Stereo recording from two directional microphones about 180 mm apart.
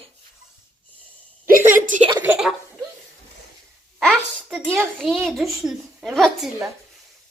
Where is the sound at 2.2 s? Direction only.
5° right (ahead or behind).